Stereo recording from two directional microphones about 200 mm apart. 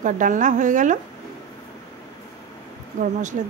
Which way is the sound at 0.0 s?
40° right (ahead or behind).